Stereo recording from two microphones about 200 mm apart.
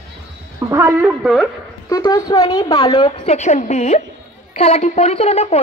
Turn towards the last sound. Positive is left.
turn(degrees=30)  # may be behind; listen again after turning